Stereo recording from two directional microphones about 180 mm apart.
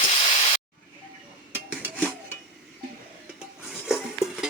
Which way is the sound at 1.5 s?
10° right (ahead or behind).